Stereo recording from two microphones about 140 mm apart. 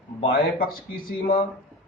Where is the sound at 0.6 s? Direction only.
90° left.